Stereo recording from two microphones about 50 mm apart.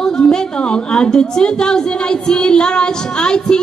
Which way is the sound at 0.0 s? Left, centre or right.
Centre.